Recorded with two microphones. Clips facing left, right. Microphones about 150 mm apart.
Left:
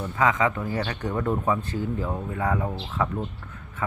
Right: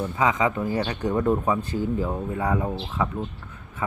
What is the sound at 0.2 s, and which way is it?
Speech, 20° right (ahead or behind).